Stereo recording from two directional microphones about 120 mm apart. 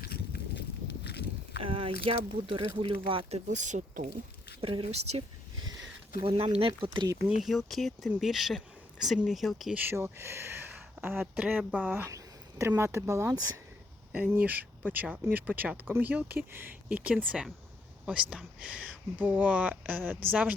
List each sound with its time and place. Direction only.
1.6 s speech: 50° right (ahead or behind); by 4.1 s 90° right
4.6 s speech: 50° right (ahead or behind)
6.2 s speech: 50° right (ahead or behind)
7.4 s speech: centre (ahead or behind)
9.7 s speech: 20° right (ahead or behind)
14.1 s speech: 15° right (ahead or behind)